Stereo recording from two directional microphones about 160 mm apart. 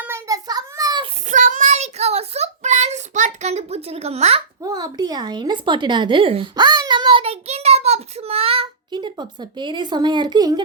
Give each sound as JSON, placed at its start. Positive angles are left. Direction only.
{"t": 0.0, "sound": "child singing", "side_deg": -20}
{"t": 1.3, "sound": "child singing", "side_deg": -50}
{"t": 4.6, "sound": "a woman's voice", "side_deg": -25}